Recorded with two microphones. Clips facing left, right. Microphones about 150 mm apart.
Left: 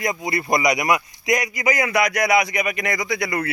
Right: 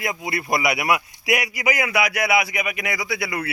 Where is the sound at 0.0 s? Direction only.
5° right (ahead or behind).